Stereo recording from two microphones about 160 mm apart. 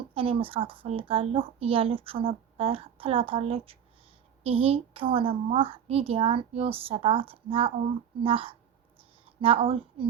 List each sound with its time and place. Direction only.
0.1 s a woman's voice: 35° right (ahead or behind)